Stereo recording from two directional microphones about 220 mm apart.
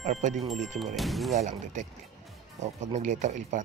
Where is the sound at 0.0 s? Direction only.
35° right (ahead or behind).